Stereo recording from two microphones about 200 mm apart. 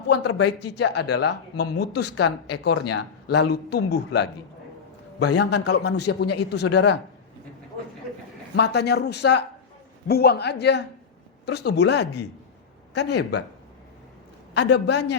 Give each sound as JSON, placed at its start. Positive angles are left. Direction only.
{"t": 0.1, "sound": "speech", "side_deg": 60}
{"t": 5.4, "sound": "speech", "side_deg": 55}
{"t": 8.5, "sound": "speech", "side_deg": 55}
{"t": 14.5, "sound": "speech", "side_deg": 60}